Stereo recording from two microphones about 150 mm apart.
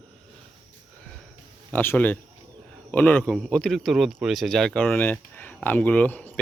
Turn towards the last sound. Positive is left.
turn(degrees=10)  # may be behind; listen again after turning